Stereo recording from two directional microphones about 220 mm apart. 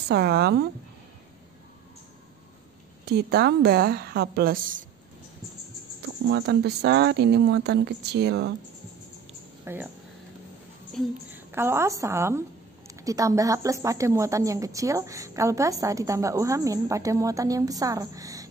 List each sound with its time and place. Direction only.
0.1 s speech: 45° right (ahead or behind)
3.1 s speech: 45° right (ahead or behind)
6.0 s speech: 50° right (ahead or behind)
9.7 s a woman's voice: 10° right (ahead or behind)
11.0 s a woman's voice: 10° right (ahead or behind)